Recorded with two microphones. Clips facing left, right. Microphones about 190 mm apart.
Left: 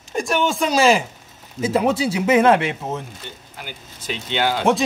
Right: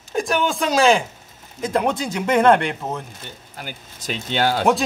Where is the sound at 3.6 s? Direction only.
45° right (ahead or behind).